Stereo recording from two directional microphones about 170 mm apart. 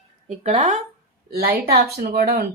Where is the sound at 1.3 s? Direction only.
65° right (ahead or behind).